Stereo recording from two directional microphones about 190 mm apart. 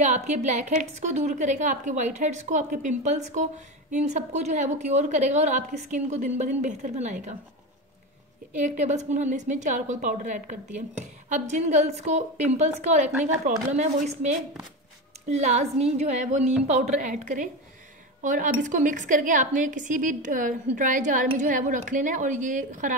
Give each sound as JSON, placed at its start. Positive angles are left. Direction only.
{"t": 0.0, "sound": "a woman's voice", "side_deg": -35}
{"t": 8.5, "sound": "a woman's voice", "side_deg": -40}